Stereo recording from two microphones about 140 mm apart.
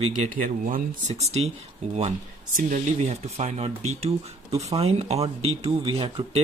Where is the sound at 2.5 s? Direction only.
60° right (ahead or behind).